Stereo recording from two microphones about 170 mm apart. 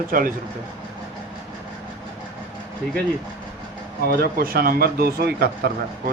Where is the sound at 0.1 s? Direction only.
55° right (ahead or behind).